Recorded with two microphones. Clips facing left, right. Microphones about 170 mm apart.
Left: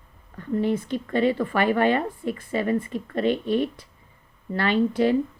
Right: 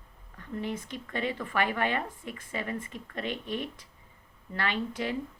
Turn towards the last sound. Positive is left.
turn(degrees=35)  # may be behind; listen again after turning